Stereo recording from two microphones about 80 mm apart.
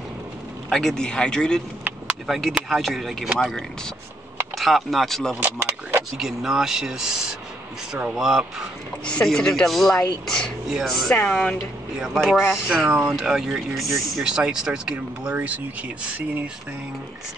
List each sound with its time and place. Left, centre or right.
0.7 s speech: centre
2.2 s speech: centre
5.6 s speech: right
6.1 s speech: centre
8.1 s speech: centre
9.0 s speech: centre
12.2 s speech: centre